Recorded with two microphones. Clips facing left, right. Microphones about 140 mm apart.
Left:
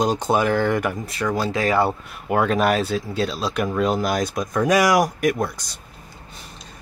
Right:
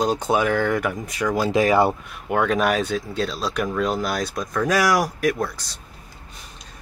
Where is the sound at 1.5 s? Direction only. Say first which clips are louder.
Right 4 dB; 15° right (ahead or behind).